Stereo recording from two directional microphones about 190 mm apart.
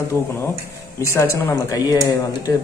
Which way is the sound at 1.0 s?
15° left (ahead or behind).